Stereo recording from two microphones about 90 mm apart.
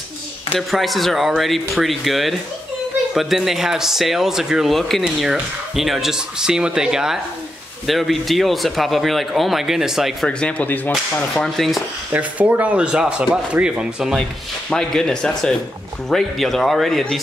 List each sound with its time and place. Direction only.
0.6 s speech: centre (ahead or behind)
10.4 s speech: 15° left (ahead or behind)
11.3 s speech: centre (ahead or behind)
12.1 s speech: 15° right (ahead or behind)
14.7 s speech: 5° left (ahead or behind)